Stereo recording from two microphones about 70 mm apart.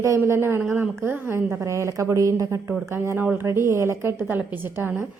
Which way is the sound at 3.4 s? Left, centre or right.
Right.